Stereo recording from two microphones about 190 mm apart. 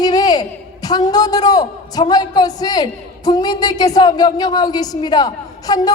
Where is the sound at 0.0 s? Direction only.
20° left (ahead or behind).